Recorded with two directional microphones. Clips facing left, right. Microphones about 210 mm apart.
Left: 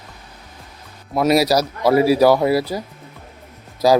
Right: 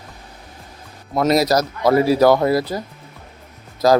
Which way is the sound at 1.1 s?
10° left (ahead or behind).